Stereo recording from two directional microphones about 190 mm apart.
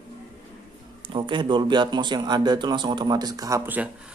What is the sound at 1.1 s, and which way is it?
Speech, 25° right (ahead or behind).